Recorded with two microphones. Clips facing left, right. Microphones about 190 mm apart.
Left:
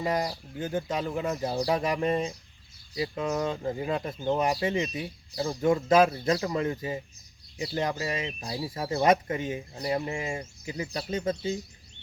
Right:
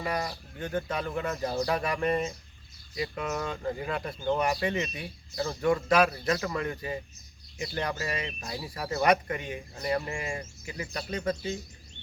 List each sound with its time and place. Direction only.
0.0 s speech: 20° left (ahead or behind)